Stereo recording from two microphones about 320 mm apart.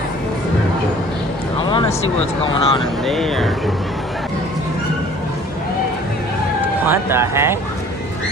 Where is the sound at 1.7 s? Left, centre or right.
Centre.